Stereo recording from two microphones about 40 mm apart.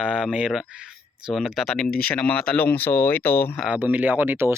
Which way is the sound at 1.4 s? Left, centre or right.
Centre.